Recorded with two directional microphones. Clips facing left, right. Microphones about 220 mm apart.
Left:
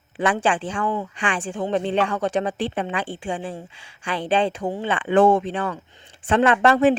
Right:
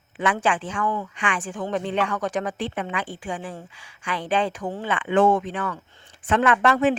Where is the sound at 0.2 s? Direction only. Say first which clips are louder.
Left 2 dB; 30° left (ahead or behind).